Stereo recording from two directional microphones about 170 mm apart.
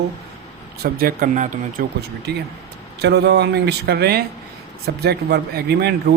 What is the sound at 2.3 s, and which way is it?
Speech, 70° right (ahead or behind).